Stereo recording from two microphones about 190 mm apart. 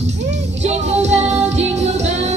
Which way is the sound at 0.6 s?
35° right (ahead or behind).